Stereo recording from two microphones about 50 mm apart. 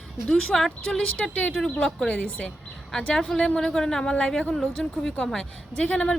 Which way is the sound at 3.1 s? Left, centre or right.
Centre.